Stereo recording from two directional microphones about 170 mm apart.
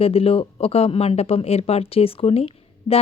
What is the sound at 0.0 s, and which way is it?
A woman's voice, 35° left (ahead or behind).